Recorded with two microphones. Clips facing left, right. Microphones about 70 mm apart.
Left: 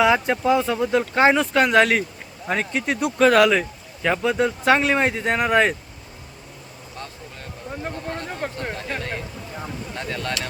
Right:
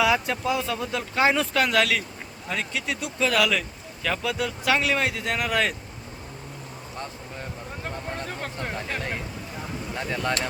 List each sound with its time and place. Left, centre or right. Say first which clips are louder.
0.0 s speech: left 5 dB; left
2.5 s speech: left 6 dB; left
3.5 s speech: left 6 dB; left
8.3 s speech: left 4 dB; centre
8.9 s speech: left 2 dB; centre